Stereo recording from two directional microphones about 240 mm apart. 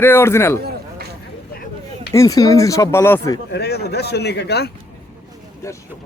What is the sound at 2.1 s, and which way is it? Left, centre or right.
Speech, centre.